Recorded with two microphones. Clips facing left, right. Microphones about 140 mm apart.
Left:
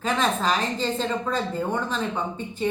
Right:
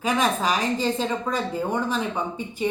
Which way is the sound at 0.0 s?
10° right (ahead or behind).